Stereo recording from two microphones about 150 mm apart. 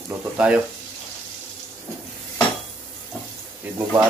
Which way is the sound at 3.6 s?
10° right (ahead or behind).